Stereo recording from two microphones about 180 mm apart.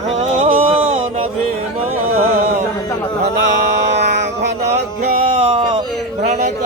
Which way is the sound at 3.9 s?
70° right (ahead or behind).